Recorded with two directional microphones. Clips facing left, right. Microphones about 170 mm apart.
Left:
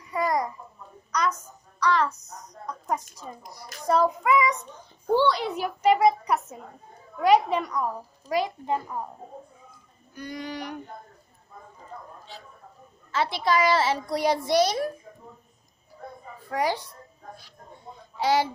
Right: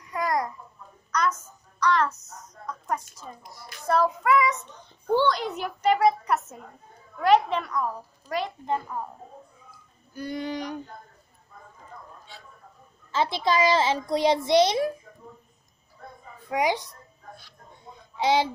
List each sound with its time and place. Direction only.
0.1 s babbling: 5° left (ahead or behind)
1.8 s a woman's voice: centre (ahead or behind)
2.6 s a woman's voice: 15° left (ahead or behind)
3.2 s a child's voice: centre (ahead or behind)
3.8 s a child's voice: 15° left (ahead or behind)
4.2 s a child's voice: centre (ahead or behind)
10.1 s a child's voice: 30° right (ahead or behind)
13.1 s a child's voice: 20° right (ahead or behind)
16.4 s speech: 15° right (ahead or behind)
18.1 s speech: 20° right (ahead or behind)